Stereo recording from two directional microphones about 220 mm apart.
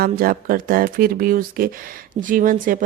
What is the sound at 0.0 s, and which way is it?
A woman's voice, 40° right (ahead or behind).